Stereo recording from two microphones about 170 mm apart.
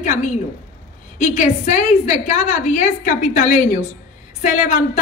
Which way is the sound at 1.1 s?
45° left (ahead or behind).